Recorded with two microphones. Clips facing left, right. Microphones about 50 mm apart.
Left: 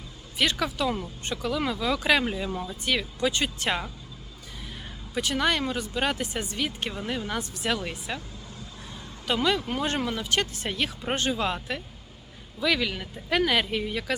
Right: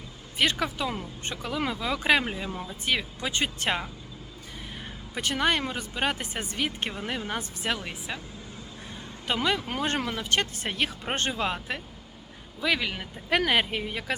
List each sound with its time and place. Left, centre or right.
0.3 s speech: right
1.2 s speech: right
2.2 s speech: right
2.5 s speech: centre
2.8 s speech: right
5.1 s speech: right
7.9 s speech: centre
9.2 s speech: right
11.4 s speech: right
13.3 s speech: right